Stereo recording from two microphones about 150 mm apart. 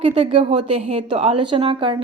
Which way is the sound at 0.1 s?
40° right (ahead or behind).